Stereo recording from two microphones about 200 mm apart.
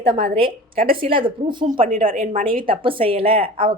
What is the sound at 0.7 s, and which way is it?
Speech, 45° right (ahead or behind).